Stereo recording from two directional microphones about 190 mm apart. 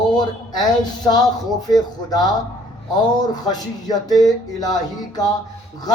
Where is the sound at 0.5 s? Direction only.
20° left (ahead or behind).